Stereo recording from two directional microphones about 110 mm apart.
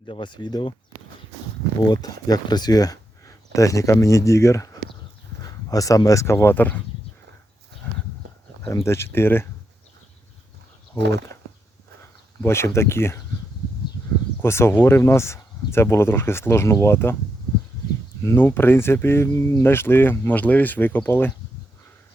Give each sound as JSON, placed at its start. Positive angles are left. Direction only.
{"t": 0.0, "sound": "speech", "side_deg": 45}
{"t": 1.8, "sound": "speech", "side_deg": 35}
{"t": 8.7, "sound": "speech", "side_deg": 25}
{"t": 12.5, "sound": "speech", "side_deg": 25}
{"t": 14.4, "sound": "speech", "side_deg": 25}
{"t": 18.2, "sound": "speech", "side_deg": 25}